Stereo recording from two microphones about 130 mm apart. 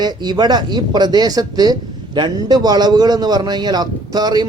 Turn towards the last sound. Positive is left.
turn(degrees=-30)  # may be behind; listen again after turning